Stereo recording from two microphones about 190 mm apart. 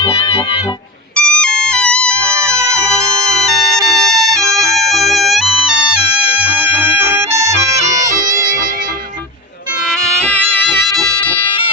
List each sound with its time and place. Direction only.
0.0 s music: 30° left (ahead or behind)
1.1 s music: 5° left (ahead or behind)
2.3 s music: 15° right (ahead or behind)
4.9 s music: centre (ahead or behind)
7.9 s music: 40° right (ahead or behind)
10.2 s music: 5° left (ahead or behind)
11.2 s music: 25° left (ahead or behind)